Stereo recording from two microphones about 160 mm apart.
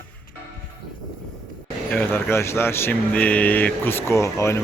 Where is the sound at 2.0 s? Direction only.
15° left (ahead or behind).